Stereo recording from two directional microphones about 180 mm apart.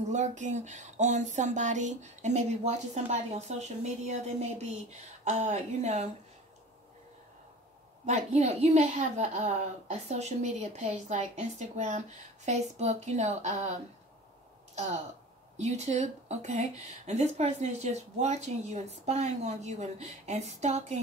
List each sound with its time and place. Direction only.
0.1 s speech: 40° right (ahead or behind)
8.1 s speech: 40° right (ahead or behind)
15.5 s speech: 40° right (ahead or behind)